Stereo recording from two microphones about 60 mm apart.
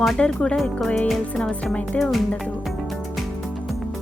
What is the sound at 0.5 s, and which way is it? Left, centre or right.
Speech, centre.